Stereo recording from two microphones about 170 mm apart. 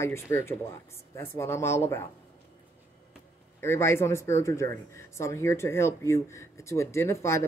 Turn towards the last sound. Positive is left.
turn(degrees=15)  # may be behind; listen again after turning